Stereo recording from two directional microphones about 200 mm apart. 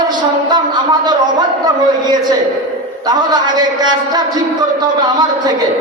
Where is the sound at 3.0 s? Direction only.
20° right (ahead or behind).